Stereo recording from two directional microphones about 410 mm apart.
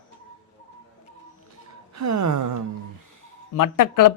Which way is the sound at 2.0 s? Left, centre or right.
Right.